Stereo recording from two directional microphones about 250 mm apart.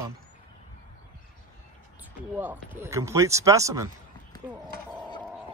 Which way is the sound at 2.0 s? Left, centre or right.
Centre.